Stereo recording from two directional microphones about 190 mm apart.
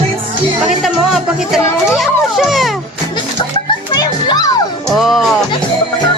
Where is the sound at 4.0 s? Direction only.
20° left (ahead or behind).